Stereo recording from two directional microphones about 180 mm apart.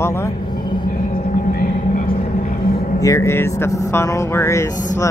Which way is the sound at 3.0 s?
15° left (ahead or behind).